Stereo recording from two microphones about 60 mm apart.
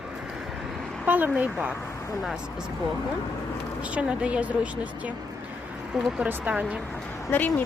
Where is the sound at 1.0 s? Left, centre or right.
Right.